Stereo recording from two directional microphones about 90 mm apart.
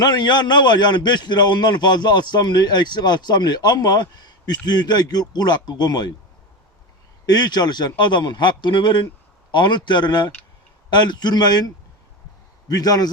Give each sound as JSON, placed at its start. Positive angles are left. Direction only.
{"t": 0.0, "sound": "a man's voice", "side_deg": 50}
{"t": 7.3, "sound": "a man's voice", "side_deg": 50}